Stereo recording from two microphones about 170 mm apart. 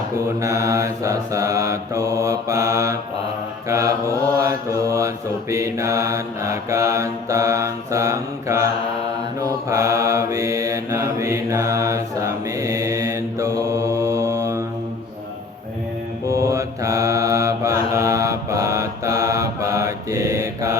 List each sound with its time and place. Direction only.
0.3 s mantra: 20° right (ahead or behind)
16.3 s mantra: 15° right (ahead or behind)